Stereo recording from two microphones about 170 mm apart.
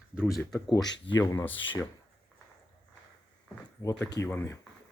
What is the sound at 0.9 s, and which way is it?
Speech, 90° left.